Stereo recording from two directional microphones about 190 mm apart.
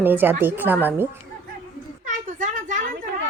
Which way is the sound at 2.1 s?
40° right (ahead or behind).